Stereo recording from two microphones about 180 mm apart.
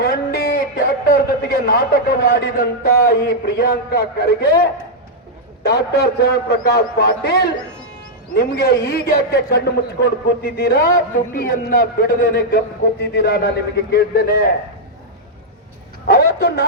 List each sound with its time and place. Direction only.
0.0 s a man's voice: 60° left (ahead or behind)
16.0 s a man's voice: 60° left (ahead or behind)